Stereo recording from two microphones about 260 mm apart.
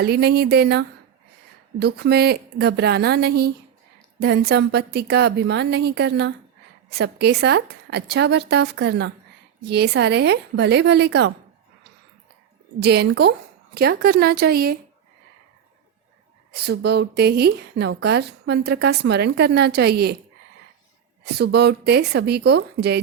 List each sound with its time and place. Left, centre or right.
0.0 s speech: right
12.8 s speech: right
16.5 s speech: right
21.3 s speech: right